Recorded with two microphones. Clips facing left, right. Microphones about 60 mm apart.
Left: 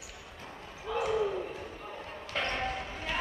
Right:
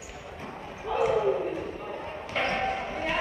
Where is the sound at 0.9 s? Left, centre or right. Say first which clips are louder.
Right 5 dB; right.